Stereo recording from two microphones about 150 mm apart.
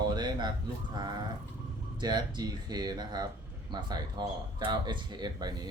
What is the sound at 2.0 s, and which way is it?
Speech, 30° right (ahead or behind).